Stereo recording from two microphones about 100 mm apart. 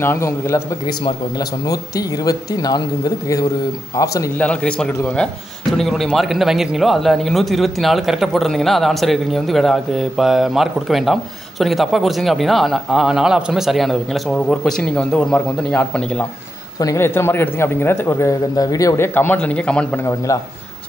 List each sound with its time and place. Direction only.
0.0 s a man's voice: 25° left (ahead or behind)
1.7 s speech: 35° left (ahead or behind)
3.9 s speech: 35° left (ahead or behind)
4.4 s a man's voice: 10° left (ahead or behind)
16.8 s a man's voice: 30° left (ahead or behind)
18.9 s a man's voice: 20° left (ahead or behind)